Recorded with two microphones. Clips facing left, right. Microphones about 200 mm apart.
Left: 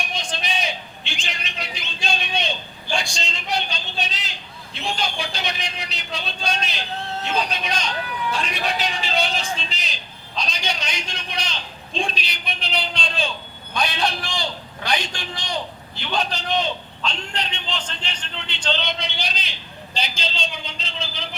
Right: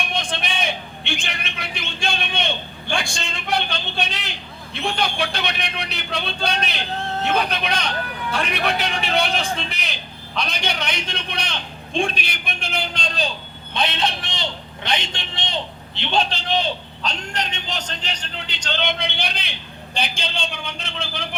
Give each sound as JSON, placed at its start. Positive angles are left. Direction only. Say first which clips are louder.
{"t": 0.0, "sound": "a man's voice", "louder": "right 3 dB", "side_deg": -55}
{"t": 13.7, "sound": "a man's voice", "louder": "right 1 dB", "side_deg": -25}